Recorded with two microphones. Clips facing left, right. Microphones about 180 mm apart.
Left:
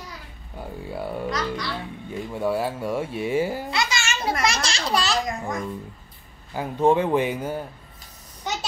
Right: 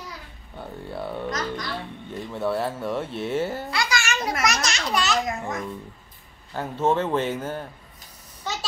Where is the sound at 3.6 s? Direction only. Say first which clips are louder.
Even; 25° left (ahead or behind).